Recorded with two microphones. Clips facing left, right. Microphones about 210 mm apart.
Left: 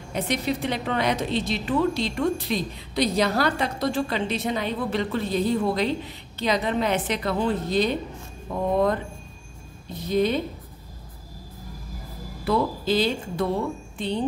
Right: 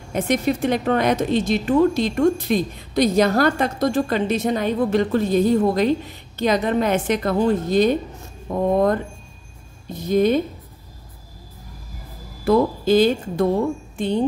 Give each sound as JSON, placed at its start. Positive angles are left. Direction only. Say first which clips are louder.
{"t": 0.1, "sound": "a woman's voice", "louder": "right 6 dB", "side_deg": -50}
{"t": 10.0, "sound": "a woman's voice", "louder": "right 5 dB", "side_deg": -45}
{"t": 12.4, "sound": "a woman's voice", "louder": "right 6 dB", "side_deg": -45}